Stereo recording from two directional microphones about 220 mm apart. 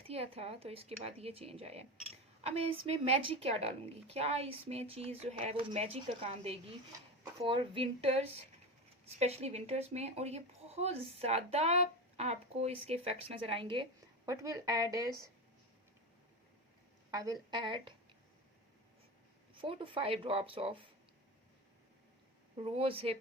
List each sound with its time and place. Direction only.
0.1 s a child's voice: 25° right (ahead or behind)
17.1 s a child's voice: 15° right (ahead or behind)
19.5 s a child's voice: 25° right (ahead or behind)
22.5 s a child's voice: 25° right (ahead or behind)